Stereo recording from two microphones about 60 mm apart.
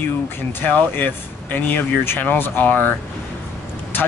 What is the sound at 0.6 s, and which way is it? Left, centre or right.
Speech, left.